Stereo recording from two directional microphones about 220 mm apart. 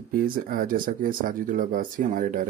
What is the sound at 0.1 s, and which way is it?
Speech, 40° right (ahead or behind).